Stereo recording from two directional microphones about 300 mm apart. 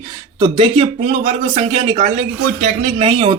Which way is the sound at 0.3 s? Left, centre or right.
Centre.